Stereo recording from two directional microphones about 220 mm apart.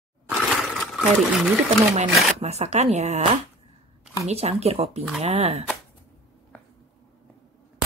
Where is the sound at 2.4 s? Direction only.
30° right (ahead or behind).